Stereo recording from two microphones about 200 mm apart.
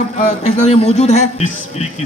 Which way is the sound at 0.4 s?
35° left (ahead or behind).